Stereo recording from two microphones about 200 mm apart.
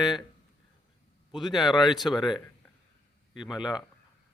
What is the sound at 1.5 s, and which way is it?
Speech, centre (ahead or behind).